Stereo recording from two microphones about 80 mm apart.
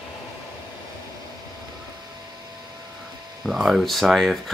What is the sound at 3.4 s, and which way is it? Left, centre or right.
Speech, centre.